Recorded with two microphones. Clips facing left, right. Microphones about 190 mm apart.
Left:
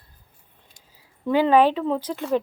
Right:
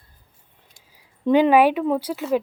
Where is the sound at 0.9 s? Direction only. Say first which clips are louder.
Right 4 dB; 15° right (ahead or behind).